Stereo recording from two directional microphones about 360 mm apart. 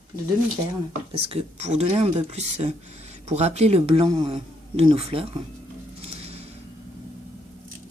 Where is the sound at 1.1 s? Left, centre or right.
Centre.